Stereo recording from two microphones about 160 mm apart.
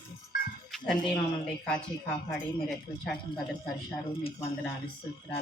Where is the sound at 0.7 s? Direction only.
Centre (ahead or behind).